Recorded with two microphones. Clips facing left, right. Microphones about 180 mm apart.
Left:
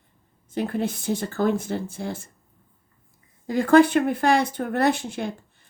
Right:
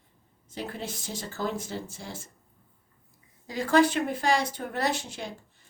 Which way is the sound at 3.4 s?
55° left (ahead or behind).